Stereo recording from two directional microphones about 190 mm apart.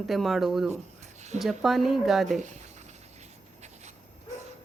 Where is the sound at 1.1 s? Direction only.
40° right (ahead or behind).